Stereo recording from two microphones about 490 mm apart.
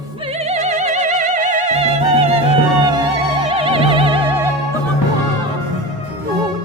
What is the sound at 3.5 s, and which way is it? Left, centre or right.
Music, centre.